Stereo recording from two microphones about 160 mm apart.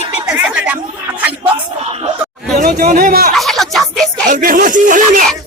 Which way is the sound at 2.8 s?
60° right (ahead or behind).